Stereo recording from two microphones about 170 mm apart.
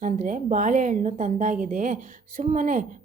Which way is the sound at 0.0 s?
50° right (ahead or behind).